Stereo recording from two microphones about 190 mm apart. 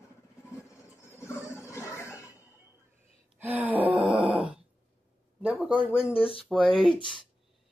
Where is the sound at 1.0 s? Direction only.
15° left (ahead or behind).